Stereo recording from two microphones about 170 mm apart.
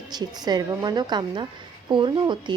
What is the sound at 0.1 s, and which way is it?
A woman's voice, 25° right (ahead or behind).